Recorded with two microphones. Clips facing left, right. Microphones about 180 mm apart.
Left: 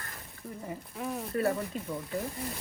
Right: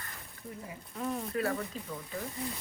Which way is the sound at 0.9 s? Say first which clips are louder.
Right 2 dB; 5° left (ahead or behind).